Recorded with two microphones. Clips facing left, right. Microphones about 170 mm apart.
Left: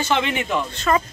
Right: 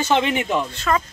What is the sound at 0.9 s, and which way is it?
Speech, 5° left (ahead or behind).